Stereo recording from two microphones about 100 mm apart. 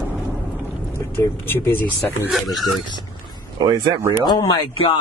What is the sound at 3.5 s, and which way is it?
Speech, 45° right (ahead or behind).